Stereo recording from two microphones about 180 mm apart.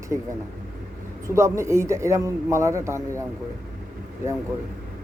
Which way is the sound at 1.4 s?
15° right (ahead or behind).